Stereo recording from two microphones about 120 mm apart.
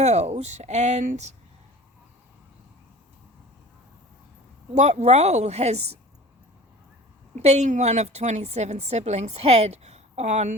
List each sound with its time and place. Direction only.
0.0 s a woman's voice: 70° right (ahead or behind)
4.7 s a woman's voice: 75° right (ahead or behind)
7.3 s a woman's voice: 70° right (ahead or behind)